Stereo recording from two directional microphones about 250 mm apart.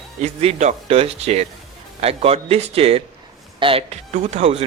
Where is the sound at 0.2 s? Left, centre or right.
Right.